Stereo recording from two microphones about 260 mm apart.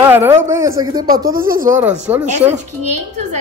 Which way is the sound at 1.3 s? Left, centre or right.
Right.